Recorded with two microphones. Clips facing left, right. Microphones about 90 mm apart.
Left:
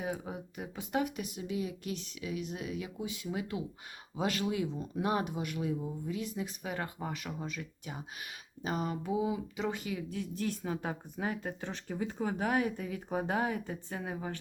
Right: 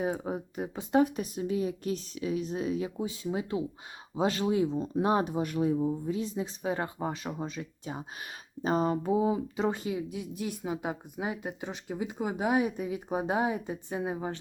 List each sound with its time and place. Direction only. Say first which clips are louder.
0.0 s speech: right 6 dB; 35° right (ahead or behind)
9.9 s speech: right 3 dB; 15° right (ahead or behind)